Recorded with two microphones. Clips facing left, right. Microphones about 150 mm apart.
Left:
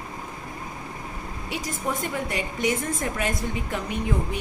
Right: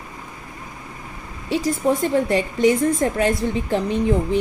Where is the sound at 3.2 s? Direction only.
25° right (ahead or behind).